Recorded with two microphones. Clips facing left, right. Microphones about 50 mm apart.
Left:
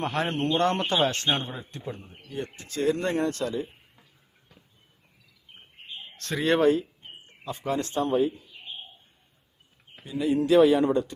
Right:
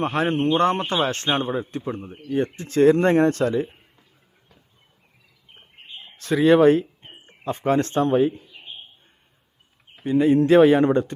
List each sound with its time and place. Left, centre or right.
0.0 s a man's voice: right
6.1 s speech: centre
6.7 s a sound: right
7.4 s speech: right
10.0 s speech: right